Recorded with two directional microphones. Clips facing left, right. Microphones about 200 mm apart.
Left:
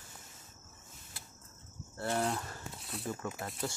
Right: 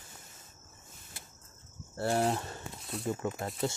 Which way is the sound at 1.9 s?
30° right (ahead or behind).